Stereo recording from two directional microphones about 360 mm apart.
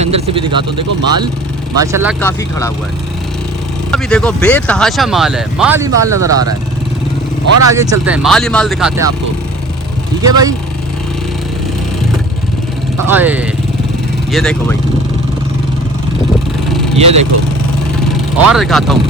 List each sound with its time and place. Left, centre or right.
0.0 s speech: centre
2.2 s speech: centre
3.9 s speech: centre
7.7 s speech: centre
10.2 s speech: centre
13.1 s speech: centre
17.0 s speech: centre
18.5 s speech: centre